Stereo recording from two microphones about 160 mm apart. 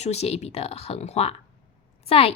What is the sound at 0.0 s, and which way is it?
A woman's voice, 40° left (ahead or behind).